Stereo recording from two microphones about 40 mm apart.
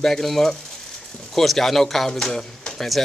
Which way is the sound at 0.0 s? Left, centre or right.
Centre.